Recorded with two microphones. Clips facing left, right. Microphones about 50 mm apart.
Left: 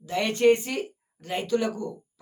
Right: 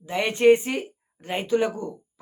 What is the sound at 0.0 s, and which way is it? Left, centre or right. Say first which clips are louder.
Speech: right 2 dB; right.